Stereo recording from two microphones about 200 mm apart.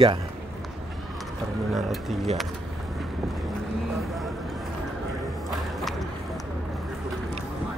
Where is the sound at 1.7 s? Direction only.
Centre (ahead or behind).